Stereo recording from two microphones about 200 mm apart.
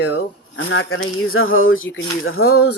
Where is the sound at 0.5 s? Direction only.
70° left (ahead or behind).